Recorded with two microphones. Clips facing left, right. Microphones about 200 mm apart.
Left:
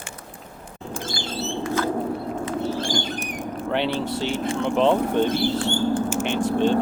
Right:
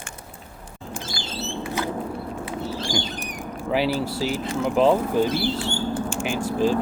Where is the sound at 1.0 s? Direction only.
50° left (ahead or behind).